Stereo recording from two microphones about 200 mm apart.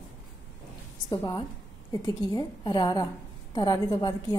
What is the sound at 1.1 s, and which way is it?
A woman's voice, 20° left (ahead or behind).